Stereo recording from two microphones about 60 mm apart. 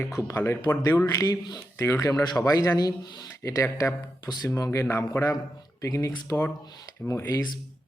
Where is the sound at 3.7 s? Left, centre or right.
Left.